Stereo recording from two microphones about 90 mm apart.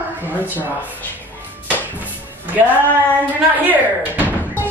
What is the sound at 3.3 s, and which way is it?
Speech, 20° right (ahead or behind).